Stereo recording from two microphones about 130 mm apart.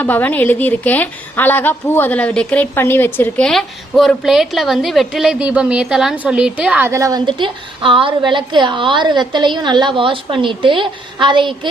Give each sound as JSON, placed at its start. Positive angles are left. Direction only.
{"t": 0.0, "sound": "a woman's voice", "side_deg": 10}
{"t": 7.3, "sound": "a woman's voice", "side_deg": -40}